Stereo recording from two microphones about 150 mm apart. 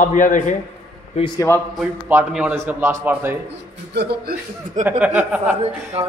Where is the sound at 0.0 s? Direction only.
60° left (ahead or behind).